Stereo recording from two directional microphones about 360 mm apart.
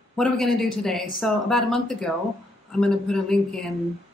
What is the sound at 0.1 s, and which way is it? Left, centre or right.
Speech, centre.